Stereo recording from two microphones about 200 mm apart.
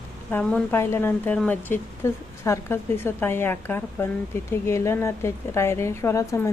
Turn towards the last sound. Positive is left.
turn(degrees=15)  # may be behind; listen again after turning